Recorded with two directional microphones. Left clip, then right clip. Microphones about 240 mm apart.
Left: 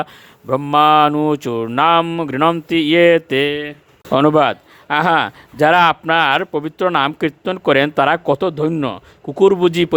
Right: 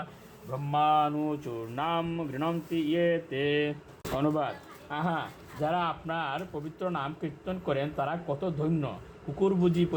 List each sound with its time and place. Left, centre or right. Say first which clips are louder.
0.5 s speech: left 14 dB; left